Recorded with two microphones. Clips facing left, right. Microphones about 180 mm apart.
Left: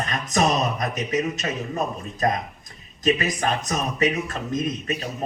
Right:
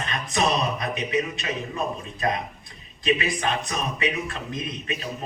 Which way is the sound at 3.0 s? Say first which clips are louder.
Left 2 dB; 40° left (ahead or behind).